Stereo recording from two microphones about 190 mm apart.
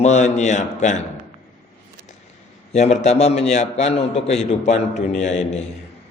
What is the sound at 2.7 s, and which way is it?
A man's voice, 35° left (ahead or behind).